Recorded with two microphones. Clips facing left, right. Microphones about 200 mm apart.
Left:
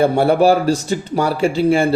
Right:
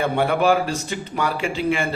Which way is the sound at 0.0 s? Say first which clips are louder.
Left 6 dB; 35° left (ahead or behind).